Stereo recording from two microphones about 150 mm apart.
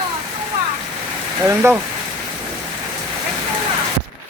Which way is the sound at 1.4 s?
15° right (ahead or behind).